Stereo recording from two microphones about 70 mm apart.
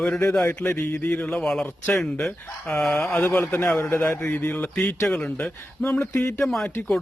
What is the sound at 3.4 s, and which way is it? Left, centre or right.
Speech, left.